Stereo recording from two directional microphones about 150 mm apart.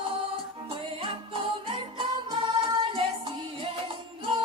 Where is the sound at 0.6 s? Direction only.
35° right (ahead or behind).